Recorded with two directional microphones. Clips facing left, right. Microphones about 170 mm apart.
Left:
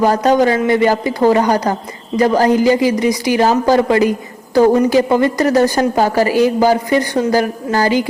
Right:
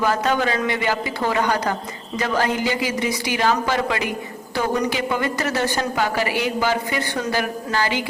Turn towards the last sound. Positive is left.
turn(degrees=40)  # may be behind; listen again after turning